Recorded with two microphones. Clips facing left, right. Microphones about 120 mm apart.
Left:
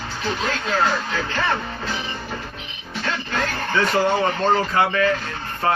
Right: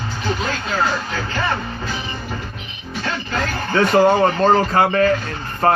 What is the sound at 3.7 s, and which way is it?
Speech, 45° right (ahead or behind).